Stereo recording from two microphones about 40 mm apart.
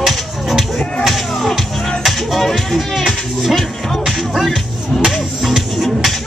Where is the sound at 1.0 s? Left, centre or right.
Centre.